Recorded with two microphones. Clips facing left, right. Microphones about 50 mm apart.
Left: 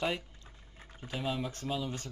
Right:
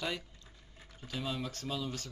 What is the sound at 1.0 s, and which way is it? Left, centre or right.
A man's voice, centre.